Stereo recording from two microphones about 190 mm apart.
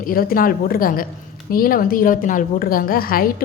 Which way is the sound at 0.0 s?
50° left (ahead or behind).